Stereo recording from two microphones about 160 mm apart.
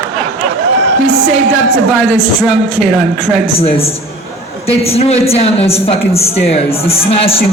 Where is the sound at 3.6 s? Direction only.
40° left (ahead or behind).